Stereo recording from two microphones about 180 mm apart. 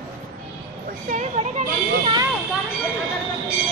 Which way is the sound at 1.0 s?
45° right (ahead or behind).